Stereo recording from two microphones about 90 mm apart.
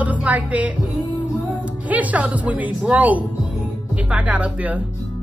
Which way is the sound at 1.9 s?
15° right (ahead or behind).